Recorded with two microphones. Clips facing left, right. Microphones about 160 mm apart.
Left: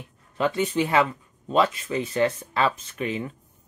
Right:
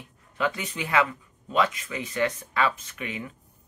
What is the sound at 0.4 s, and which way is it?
Speech, 30° left (ahead or behind).